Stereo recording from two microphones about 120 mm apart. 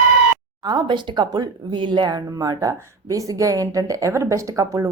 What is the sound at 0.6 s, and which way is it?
Speech, 35° right (ahead or behind).